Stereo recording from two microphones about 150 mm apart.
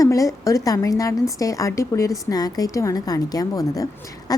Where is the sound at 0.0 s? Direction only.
20° left (ahead or behind).